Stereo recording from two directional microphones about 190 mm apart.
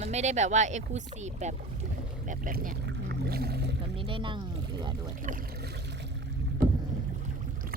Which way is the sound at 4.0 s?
25° right (ahead or behind).